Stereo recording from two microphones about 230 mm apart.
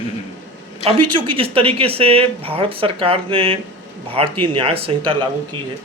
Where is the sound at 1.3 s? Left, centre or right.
Right.